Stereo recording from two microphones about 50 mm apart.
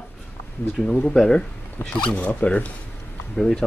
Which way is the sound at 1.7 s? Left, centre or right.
Left.